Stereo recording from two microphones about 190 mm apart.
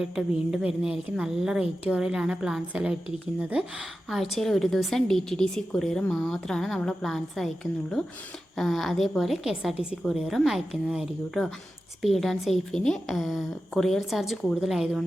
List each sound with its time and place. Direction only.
0.0 s a woman's voice: 5° right (ahead or behind)